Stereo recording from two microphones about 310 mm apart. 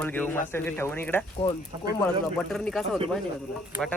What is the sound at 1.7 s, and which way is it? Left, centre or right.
Speech, centre.